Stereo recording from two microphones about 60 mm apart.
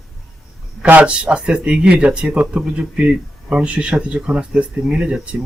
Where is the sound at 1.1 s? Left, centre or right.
Centre.